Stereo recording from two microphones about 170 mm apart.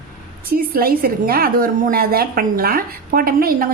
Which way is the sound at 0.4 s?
60° right (ahead or behind).